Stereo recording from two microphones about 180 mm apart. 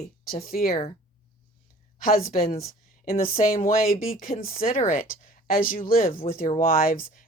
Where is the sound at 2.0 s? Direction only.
50° left (ahead or behind).